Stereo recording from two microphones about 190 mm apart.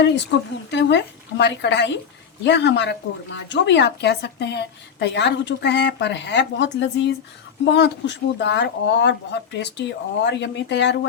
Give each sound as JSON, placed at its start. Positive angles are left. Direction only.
{"t": 0.3, "sound": "speech", "side_deg": 65}